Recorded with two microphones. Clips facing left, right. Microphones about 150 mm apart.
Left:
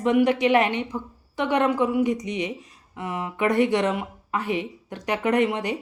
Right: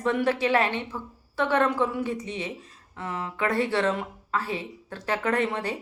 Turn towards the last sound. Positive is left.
turn(degrees=15)  # may be behind; listen again after turning